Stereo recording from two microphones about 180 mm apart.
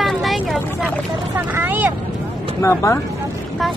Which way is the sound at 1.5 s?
10° right (ahead or behind).